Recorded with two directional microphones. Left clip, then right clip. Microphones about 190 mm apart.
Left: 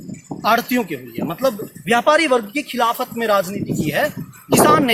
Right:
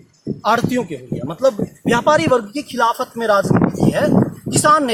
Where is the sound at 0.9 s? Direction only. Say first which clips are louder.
Left 1 dB; 10° right (ahead or behind).